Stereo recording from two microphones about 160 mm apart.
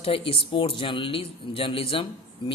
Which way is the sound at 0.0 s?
35° left (ahead or behind).